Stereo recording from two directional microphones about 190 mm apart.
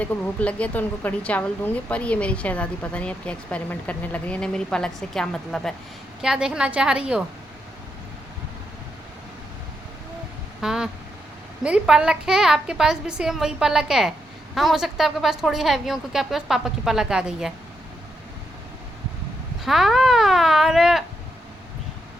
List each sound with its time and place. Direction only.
0.0 s a woman's voice: 10° left (ahead or behind)
10.6 s vehicle: 5° right (ahead or behind)
11.6 s a woman's voice: 5° right (ahead or behind)
19.6 s speech: centre (ahead or behind)